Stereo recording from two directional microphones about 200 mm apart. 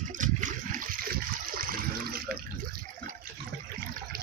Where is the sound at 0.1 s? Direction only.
40° right (ahead or behind).